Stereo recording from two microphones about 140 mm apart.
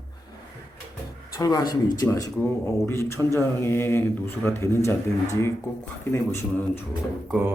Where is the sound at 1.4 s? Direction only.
25° left (ahead or behind).